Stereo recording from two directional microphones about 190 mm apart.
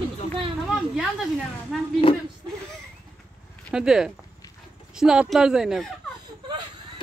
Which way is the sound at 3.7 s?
5° right (ahead or behind).